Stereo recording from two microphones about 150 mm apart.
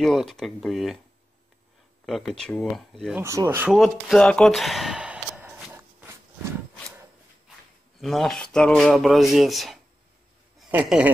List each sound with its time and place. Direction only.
0.0 s speech: centre (ahead or behind)
2.0 s speech: 5° left (ahead or behind)
3.2 s speech: 15° right (ahead or behind)
3.7 s speech: centre (ahead or behind)
5.7 s a sound: 10° right (ahead or behind)
8.0 s speech: centre (ahead or behind)